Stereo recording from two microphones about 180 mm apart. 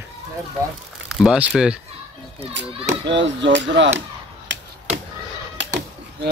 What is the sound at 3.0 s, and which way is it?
Speech, 85° right.